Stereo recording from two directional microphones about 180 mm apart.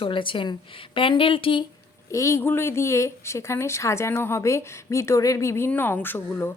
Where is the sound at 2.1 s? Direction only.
15° left (ahead or behind).